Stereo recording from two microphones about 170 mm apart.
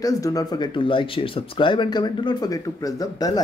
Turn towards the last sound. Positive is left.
turn(degrees=20)  # may be behind; listen again after turning